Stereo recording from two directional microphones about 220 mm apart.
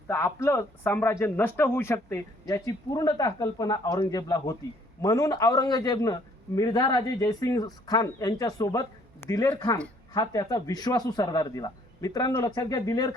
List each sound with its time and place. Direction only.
0.1 s speech: 10° left (ahead or behind)